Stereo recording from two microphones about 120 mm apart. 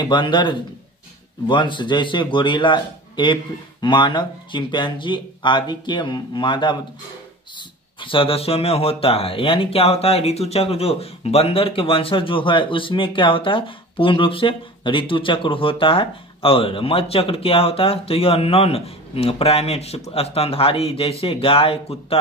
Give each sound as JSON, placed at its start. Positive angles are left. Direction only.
{"t": 0.0, "sound": "speech", "side_deg": 40}